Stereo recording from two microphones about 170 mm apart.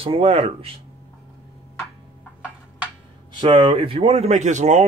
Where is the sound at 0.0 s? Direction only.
35° right (ahead or behind).